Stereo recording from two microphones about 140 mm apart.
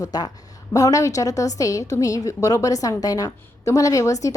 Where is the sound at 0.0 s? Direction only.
30° left (ahead or behind).